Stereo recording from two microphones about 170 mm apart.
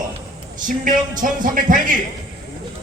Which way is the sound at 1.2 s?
50° right (ahead or behind).